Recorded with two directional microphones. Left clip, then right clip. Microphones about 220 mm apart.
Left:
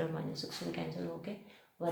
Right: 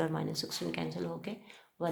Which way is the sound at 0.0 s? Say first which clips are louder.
Right 4 dB; 35° right (ahead or behind).